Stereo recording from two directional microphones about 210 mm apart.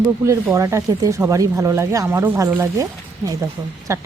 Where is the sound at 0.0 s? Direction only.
10° right (ahead or behind).